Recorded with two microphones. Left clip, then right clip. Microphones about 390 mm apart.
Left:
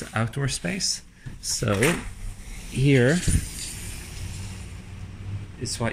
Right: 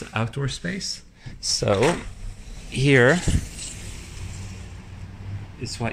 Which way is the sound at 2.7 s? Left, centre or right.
Centre.